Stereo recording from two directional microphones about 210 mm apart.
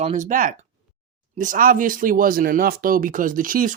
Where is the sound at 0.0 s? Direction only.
35° right (ahead or behind).